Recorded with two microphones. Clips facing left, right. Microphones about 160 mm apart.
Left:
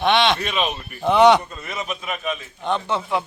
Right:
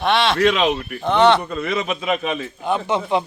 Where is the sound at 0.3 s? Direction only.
90° right.